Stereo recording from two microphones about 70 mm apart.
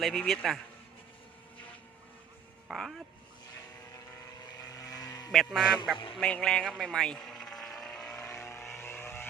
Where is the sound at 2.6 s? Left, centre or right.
Centre.